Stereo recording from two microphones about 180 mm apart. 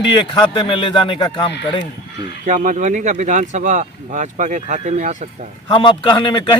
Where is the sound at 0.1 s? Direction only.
25° left (ahead or behind).